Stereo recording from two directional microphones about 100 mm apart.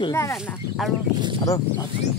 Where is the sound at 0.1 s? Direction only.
30° left (ahead or behind).